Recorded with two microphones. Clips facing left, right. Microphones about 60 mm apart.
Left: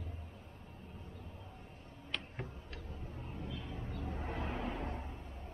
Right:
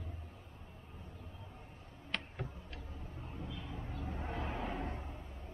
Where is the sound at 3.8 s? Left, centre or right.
Centre.